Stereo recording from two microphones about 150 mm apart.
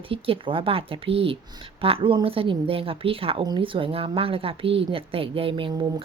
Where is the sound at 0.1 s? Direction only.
35° right (ahead or behind).